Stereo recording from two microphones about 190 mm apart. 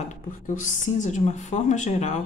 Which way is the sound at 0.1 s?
40° left (ahead or behind).